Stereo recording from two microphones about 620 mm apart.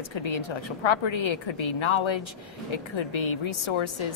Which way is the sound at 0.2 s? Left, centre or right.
Left.